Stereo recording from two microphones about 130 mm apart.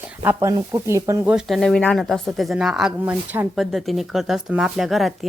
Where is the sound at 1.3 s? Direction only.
5° right (ahead or behind).